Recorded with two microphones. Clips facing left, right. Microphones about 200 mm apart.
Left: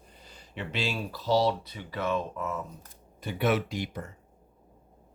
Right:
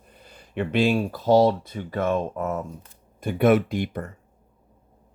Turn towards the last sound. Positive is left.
turn(degrees=-55)  # may be behind; listen again after turning